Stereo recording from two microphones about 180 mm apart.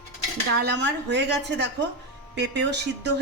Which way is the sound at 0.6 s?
75° right (ahead or behind).